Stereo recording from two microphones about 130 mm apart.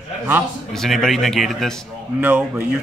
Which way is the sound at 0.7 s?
5° left (ahead or behind).